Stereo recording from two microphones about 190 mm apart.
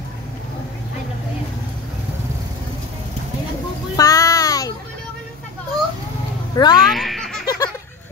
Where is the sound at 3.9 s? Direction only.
20° left (ahead or behind).